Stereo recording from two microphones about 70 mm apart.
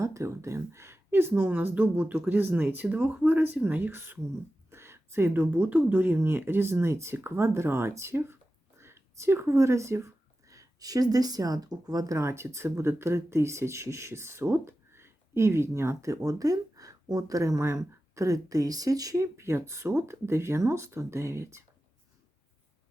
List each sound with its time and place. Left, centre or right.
0.0 s speech: right
6.1 s speech: right
19.1 s speech: right